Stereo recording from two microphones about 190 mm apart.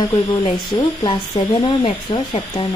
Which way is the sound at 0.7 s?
20° left (ahead or behind).